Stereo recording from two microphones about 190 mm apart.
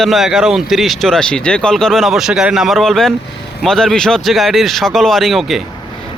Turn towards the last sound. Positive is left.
turn(degrees=0)  # may be behind; listen again after turning